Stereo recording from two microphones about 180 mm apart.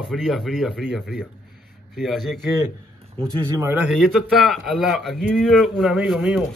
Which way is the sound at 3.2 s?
30° right (ahead or behind).